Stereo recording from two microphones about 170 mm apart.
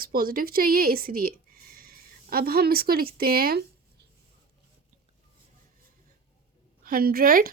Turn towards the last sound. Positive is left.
turn(degrees=-60)  # may be behind; listen again after turning